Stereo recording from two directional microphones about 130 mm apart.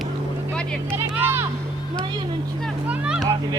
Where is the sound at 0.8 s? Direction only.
15° right (ahead or behind).